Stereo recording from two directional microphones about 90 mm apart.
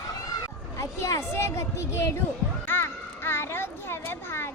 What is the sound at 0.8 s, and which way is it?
Speech, 35° left (ahead or behind).